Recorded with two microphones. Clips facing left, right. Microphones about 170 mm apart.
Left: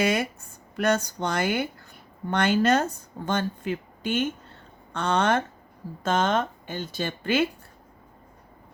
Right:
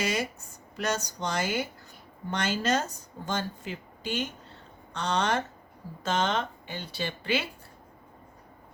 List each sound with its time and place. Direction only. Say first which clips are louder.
0.0 s speech: left 5 dB; 55° left (ahead or behind)